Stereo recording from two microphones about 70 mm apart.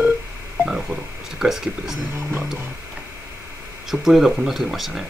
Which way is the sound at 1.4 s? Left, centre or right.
Centre.